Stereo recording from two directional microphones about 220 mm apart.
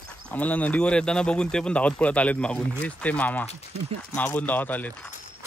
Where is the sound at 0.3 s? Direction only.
5° left (ahead or behind).